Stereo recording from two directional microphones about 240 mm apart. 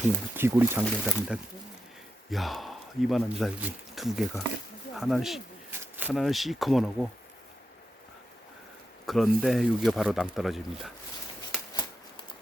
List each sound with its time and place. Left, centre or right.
0.3 s speech: centre
9.0 s speech: centre
11.7 s shuffling cards: centre